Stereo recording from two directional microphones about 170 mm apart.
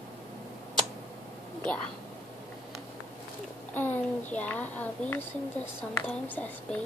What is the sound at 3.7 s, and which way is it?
A child's voice, 10° left (ahead or behind).